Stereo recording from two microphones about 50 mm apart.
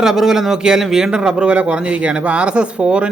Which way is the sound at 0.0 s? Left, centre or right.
Centre.